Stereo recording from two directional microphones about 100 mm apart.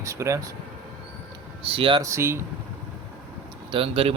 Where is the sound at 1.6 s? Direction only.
65° right (ahead or behind).